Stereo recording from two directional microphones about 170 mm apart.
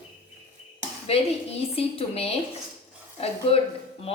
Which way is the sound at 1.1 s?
35° left (ahead or behind).